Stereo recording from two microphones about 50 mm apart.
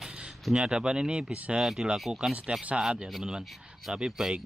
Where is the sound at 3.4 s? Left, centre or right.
Centre.